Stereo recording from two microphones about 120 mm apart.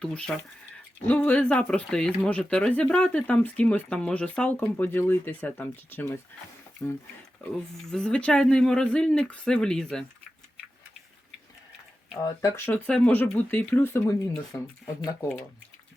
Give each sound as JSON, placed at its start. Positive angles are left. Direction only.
{"t": 0.0, "sound": "speech", "side_deg": 5}
{"t": 7.8, "sound": "speech", "side_deg": 5}
{"t": 12.2, "sound": "speech", "side_deg": 25}
{"t": 12.7, "sound": "speech", "side_deg": 10}